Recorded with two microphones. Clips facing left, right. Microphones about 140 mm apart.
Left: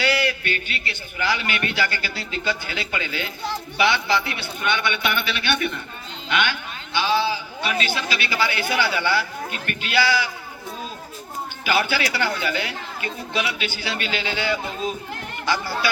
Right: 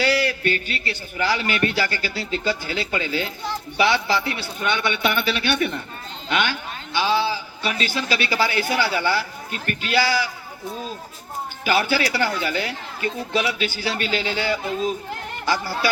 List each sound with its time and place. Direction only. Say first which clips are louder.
0.0 s a man's voice: right 2 dB; 35° right (ahead or behind)
11.6 s a man's voice: right 2 dB; 40° right (ahead or behind)